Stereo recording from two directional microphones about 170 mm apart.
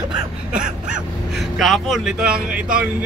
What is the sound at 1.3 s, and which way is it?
Speech, centre (ahead or behind).